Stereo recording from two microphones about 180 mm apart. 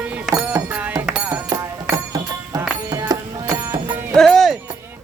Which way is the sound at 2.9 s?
20° right (ahead or behind).